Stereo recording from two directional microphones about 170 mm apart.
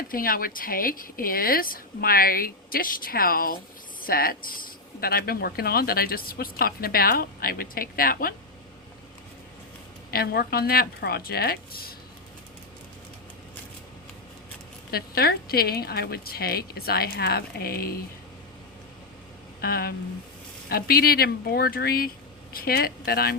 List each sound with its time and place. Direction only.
0.1 s speech: 60° left (ahead or behind)
10.1 s speech: 65° left (ahead or behind)
14.8 s speech: 65° left (ahead or behind)
19.6 s speech: 65° left (ahead or behind)